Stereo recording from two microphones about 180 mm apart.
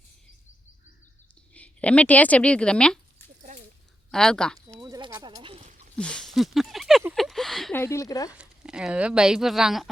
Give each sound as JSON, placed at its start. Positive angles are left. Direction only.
{"t": 1.5, "sound": "speech", "side_deg": 5}
{"t": 4.1, "sound": "speech", "side_deg": 5}
{"t": 4.5, "sound": "a sound", "side_deg": -20}
{"t": 6.0, "sound": "speech", "side_deg": 5}
{"t": 7.0, "sound": "a sound", "side_deg": 0}
{"t": 7.8, "sound": "speech", "side_deg": 15}
{"t": 8.3, "sound": "speech", "side_deg": -5}